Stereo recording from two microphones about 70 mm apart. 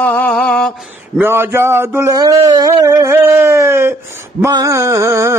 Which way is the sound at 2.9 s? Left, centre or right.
Right.